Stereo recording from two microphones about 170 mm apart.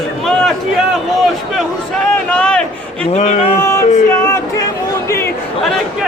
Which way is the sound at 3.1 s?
40° left (ahead or behind).